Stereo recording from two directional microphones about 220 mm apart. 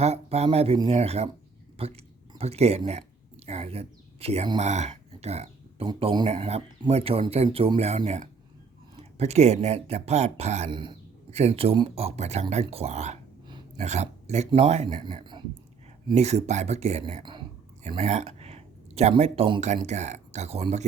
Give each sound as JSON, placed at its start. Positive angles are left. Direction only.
{"t": 0.0, "sound": "speech", "side_deg": -30}